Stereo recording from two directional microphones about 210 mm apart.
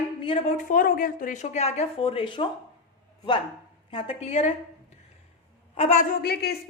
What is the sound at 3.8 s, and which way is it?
Speech, 25° left (ahead or behind).